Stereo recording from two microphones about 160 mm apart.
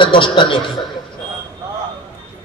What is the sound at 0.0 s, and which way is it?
Speech, 30° left (ahead or behind).